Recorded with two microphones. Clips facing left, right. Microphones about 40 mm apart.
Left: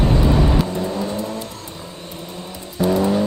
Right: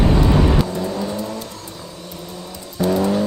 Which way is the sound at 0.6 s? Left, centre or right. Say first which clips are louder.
Even; centre.